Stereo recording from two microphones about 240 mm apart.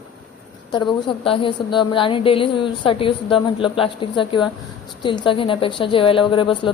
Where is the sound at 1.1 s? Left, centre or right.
Left.